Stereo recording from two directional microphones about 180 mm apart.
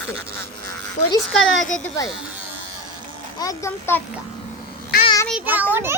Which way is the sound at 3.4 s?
20° left (ahead or behind).